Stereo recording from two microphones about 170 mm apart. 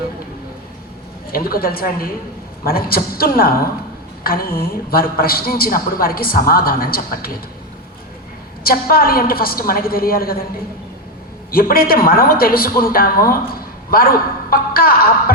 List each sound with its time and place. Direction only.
1.3 s a man's voice: 60° left (ahead or behind)
8.6 s a man's voice: 60° left (ahead or behind)
11.5 s a man's voice: 60° left (ahead or behind)
14.5 s music: 60° left (ahead or behind)